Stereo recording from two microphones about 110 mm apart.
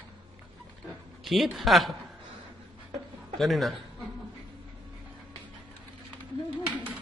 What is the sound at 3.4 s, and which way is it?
Speech, centre (ahead or behind).